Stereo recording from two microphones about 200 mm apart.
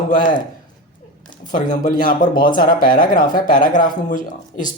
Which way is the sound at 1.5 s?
40° left (ahead or behind).